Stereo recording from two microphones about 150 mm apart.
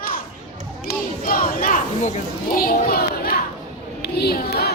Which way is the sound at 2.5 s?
75° left (ahead or behind).